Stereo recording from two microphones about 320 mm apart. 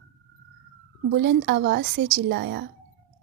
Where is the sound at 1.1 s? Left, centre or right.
Right.